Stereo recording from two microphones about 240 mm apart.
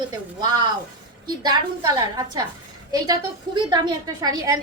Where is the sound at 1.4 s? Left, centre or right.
Centre.